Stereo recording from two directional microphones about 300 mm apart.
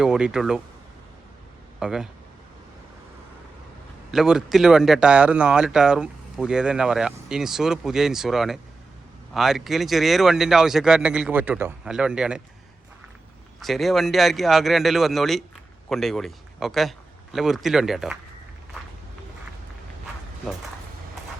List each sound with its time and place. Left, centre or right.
0.0 s speech: centre
1.8 s speech: centre
4.1 s speech: centre
13.6 s speech: centre